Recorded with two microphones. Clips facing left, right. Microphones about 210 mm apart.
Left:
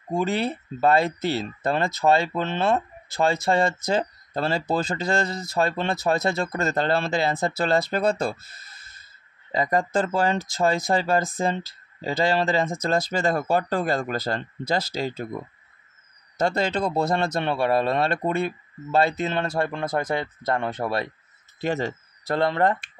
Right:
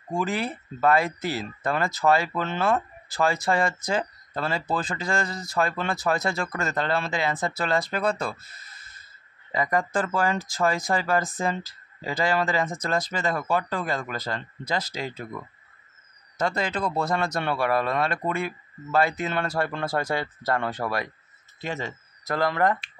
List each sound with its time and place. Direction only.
0.1 s speech: 25° left (ahead or behind)
9.5 s speech: 30° left (ahead or behind)
13.2 s speech: 35° left (ahead or behind)
21.5 s speech: 35° left (ahead or behind)